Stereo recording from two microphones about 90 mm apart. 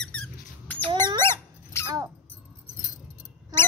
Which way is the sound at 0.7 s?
20° left (ahead or behind).